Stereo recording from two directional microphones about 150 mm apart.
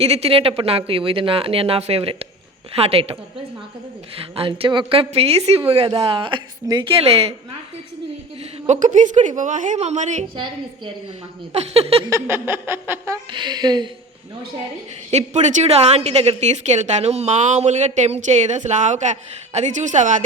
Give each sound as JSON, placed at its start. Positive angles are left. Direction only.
{"t": 0.0, "sound": "speech", "side_deg": -45}
{"t": 4.4, "sound": "speech", "side_deg": -40}
{"t": 8.6, "sound": "a woman's voice", "side_deg": -55}
{"t": 10.3, "sound": "speech", "side_deg": -35}
{"t": 11.5, "sound": "a woman's voice", "side_deg": -45}
{"t": 12.0, "sound": "a sound", "side_deg": -15}
{"t": 13.3, "sound": "a woman's voice", "side_deg": -30}
{"t": 15.1, "sound": "a woman's voice", "side_deg": -50}